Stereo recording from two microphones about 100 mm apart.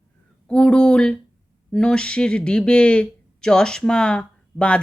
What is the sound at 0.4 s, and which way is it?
Speech, 10° left (ahead or behind).